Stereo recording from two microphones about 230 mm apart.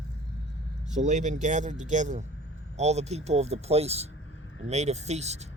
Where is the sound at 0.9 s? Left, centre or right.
Right.